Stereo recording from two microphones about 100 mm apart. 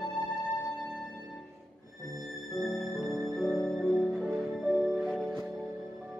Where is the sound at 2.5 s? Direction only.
Centre (ahead or behind).